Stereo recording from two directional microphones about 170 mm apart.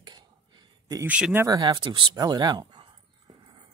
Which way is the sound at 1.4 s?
20° right (ahead or behind).